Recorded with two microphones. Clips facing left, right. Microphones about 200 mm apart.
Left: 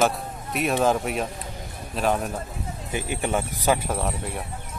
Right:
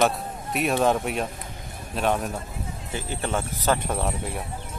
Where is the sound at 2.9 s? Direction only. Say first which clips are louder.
Left 2 dB; 15° left (ahead or behind).